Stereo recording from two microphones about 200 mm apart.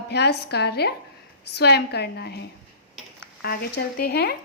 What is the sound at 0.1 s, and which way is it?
A woman's voice, 55° left (ahead or behind).